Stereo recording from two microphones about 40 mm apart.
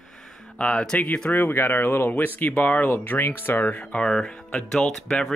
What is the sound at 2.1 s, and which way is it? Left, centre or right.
Speech, left.